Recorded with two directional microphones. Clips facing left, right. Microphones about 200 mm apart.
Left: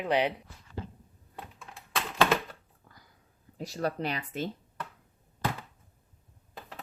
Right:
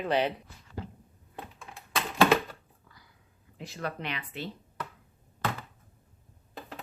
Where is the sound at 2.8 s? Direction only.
45° left (ahead or behind).